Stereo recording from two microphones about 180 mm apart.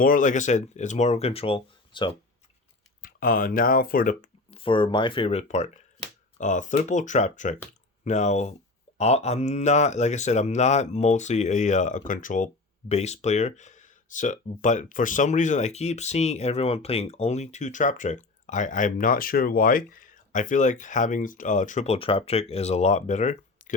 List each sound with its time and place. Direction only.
0.0 s speech: 50° left (ahead or behind); by 2.1 s 30° left (ahead or behind)
3.0 s speech: 50° left (ahead or behind)
4.5 s speech: 30° left (ahead or behind)